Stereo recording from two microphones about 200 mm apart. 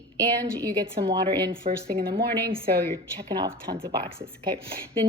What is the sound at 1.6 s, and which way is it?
Speech, 50° right (ahead or behind).